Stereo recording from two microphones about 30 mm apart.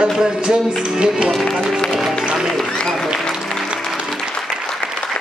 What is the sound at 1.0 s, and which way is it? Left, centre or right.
Speech, right.